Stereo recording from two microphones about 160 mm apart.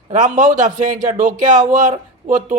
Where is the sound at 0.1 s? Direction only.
55° right (ahead or behind).